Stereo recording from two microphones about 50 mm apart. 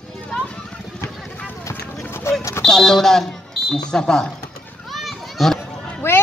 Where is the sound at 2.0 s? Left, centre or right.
Left.